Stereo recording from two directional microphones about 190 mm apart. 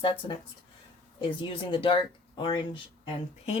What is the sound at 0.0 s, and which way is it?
Speech, 30° left (ahead or behind).